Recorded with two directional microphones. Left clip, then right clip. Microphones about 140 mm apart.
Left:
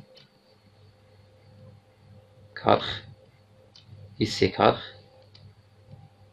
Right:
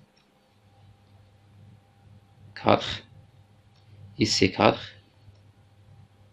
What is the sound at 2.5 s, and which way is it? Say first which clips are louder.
Speech: even; 30° right (ahead or behind).